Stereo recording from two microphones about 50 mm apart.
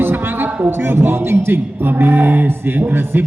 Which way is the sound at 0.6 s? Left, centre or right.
Right.